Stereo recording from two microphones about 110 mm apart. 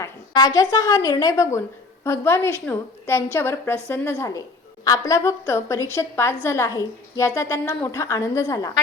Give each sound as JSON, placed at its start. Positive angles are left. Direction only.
{"t": 0.0, "sound": "a woman's voice", "side_deg": 35}